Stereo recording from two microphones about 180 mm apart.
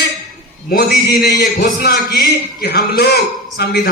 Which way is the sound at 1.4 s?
65° left (ahead or behind).